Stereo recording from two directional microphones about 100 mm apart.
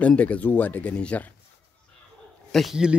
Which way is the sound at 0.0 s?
15° left (ahead or behind).